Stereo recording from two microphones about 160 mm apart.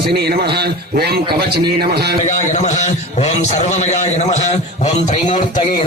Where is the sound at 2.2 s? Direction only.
50° left (ahead or behind).